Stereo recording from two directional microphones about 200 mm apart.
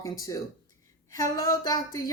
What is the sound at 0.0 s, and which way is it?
Speech, 15° left (ahead or behind).